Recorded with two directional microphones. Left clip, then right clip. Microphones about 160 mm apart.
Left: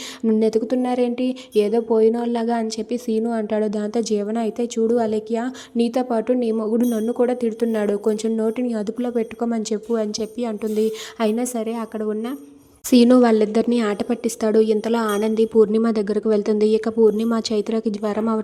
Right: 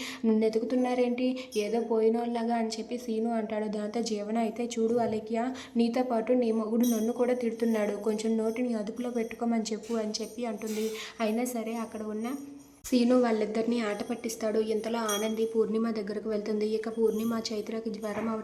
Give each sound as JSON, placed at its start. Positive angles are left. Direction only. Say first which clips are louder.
{"t": 0.3, "sound": "a woman's voice", "louder": "left 9 dB", "side_deg": 40}